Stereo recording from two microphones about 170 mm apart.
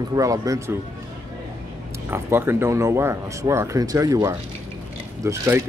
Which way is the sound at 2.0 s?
15° right (ahead or behind).